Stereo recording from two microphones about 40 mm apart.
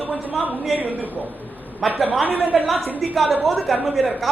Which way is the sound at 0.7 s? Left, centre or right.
Right.